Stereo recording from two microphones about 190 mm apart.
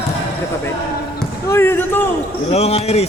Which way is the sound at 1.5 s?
10° left (ahead or behind).